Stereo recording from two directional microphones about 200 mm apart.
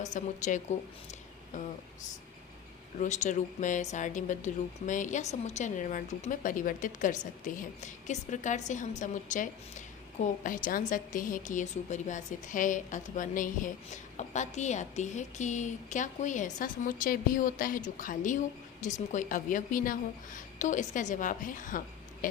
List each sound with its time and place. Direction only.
0.0 s speech: 35° left (ahead or behind)
3.0 s speech: 40° left (ahead or behind)